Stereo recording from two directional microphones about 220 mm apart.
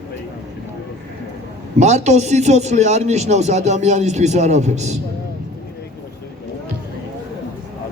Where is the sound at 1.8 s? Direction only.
30° right (ahead or behind).